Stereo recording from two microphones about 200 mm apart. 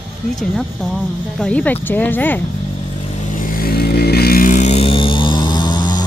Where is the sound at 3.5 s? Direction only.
50° left (ahead or behind).